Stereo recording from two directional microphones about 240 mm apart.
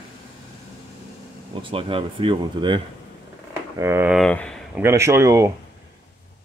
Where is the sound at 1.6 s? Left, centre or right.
Right.